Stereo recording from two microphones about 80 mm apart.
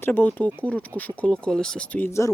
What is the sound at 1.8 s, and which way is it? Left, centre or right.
Speech, left.